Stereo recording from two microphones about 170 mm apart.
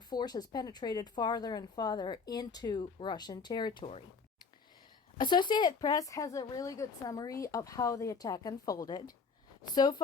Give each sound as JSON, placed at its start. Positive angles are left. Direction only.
{"t": 0.1, "sound": "speech", "side_deg": 25}
{"t": 5.1, "sound": "speech", "side_deg": 25}